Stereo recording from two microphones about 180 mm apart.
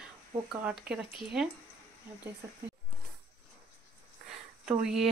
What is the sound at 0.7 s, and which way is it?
Speech, 5° right (ahead or behind).